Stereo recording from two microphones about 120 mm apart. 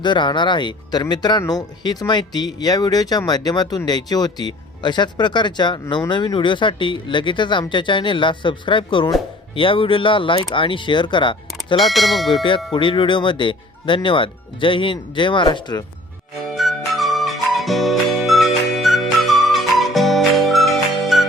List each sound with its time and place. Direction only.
0.0 s speech: 40° left (ahead or behind)
11.8 s speech: centre (ahead or behind)
12.3 s speech: 45° left (ahead or behind)
16.6 s music: centre (ahead or behind)